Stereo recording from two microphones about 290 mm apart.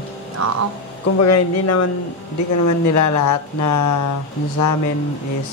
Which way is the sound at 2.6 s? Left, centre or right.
Left.